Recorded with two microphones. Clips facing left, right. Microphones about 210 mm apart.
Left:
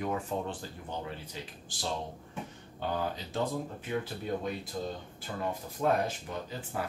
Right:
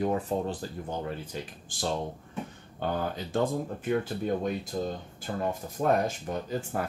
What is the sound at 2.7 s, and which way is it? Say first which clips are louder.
Speech: right 3 dB; 50° right (ahead or behind).